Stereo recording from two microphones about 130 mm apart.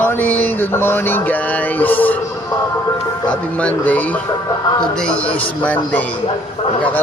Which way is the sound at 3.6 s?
10° left (ahead or behind).